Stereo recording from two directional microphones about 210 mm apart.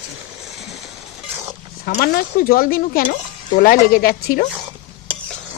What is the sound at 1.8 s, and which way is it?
Speech, 45° left (ahead or behind).